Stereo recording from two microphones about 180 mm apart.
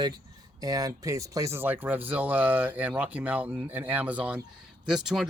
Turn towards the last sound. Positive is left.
turn(degrees=-5)  # may be behind; listen again after turning